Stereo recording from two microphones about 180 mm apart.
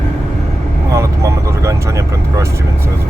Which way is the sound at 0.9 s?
15° right (ahead or behind).